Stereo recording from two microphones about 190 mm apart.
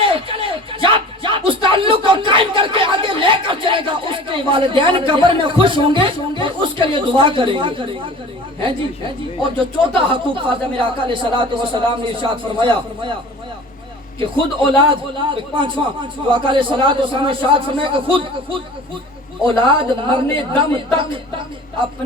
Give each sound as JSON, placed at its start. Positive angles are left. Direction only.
{"t": 0.0, "sound": "music", "side_deg": -30}
{"t": 0.9, "sound": "a sound", "side_deg": -25}
{"t": 8.6, "sound": "speech", "side_deg": -25}
{"t": 14.8, "sound": "speech", "side_deg": -25}